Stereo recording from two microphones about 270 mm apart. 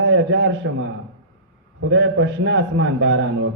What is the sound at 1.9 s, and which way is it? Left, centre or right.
A man's voice, right.